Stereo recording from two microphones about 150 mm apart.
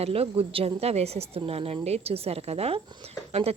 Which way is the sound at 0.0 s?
40° right (ahead or behind).